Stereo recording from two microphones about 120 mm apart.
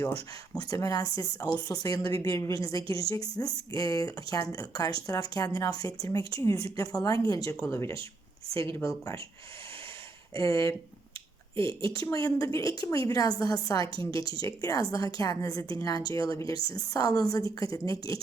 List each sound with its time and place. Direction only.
0.5 s a woman's voice: 30° left (ahead or behind)
10.3 s a woman's voice: 25° left (ahead or behind)
11.5 s a woman's voice: 45° right (ahead or behind)
12.0 s a woman's voice: 30° left (ahead or behind)